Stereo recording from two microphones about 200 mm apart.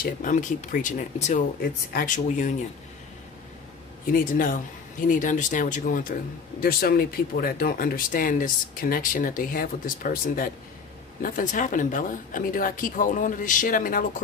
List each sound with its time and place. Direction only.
0.0 s speech: 40° left (ahead or behind)
1.6 s speech: 50° left (ahead or behind)
4.1 s speech: 45° left (ahead or behind)